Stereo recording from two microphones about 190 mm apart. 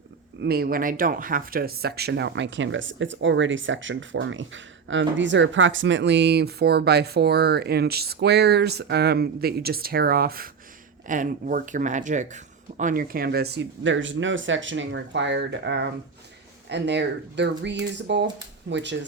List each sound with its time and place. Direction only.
0.4 s speech: 55° right (ahead or behind)